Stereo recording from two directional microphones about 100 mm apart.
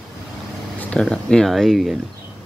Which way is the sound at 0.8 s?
10° left (ahead or behind).